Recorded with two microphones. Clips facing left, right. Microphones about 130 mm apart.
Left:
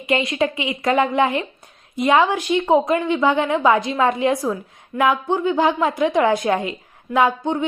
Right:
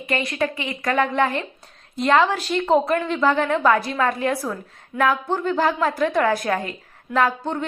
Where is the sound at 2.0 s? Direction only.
10° left (ahead or behind).